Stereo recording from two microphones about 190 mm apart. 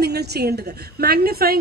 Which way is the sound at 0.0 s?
60° right (ahead or behind).